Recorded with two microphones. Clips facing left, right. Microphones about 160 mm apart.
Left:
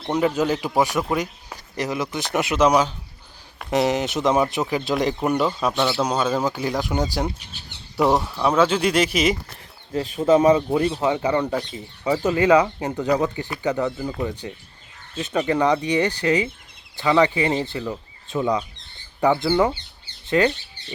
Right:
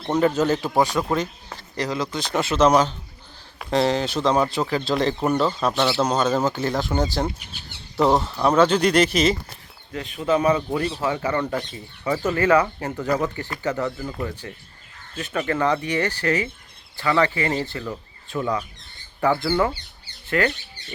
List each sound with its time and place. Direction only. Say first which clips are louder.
0.0 s speech: right 1 dB; 10° left (ahead or behind)
5.7 s a man's voice: even; 5° right (ahead or behind)
6.0 s speech: right 1 dB; 10° left (ahead or behind)
9.9 s speech: left 5 dB; 35° left (ahead or behind)
10.4 s speech: left 4 dB; 20° left (ahead or behind)